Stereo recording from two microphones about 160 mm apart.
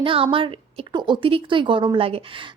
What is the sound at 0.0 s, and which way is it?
A woman's voice, 35° right (ahead or behind).